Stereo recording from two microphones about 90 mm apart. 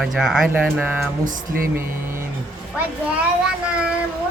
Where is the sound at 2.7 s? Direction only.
15° right (ahead or behind).